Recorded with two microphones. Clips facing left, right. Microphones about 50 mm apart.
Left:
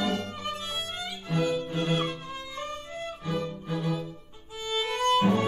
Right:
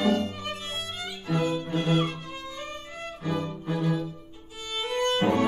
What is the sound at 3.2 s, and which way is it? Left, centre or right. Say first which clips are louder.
Music: right 3 dB; centre.